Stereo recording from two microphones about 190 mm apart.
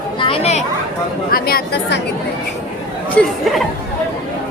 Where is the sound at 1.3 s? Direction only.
50° left (ahead or behind).